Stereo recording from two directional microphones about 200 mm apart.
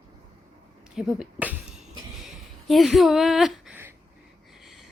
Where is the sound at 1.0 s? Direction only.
5° right (ahead or behind).